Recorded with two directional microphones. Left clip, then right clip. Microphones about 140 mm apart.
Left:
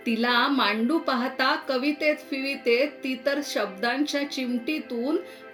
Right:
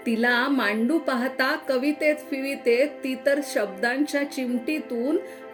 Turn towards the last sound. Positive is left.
turn(degrees=-10)  # may be behind; listen again after turning